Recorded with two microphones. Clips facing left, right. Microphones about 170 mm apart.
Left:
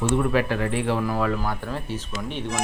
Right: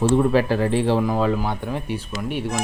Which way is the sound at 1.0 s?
20° right (ahead or behind).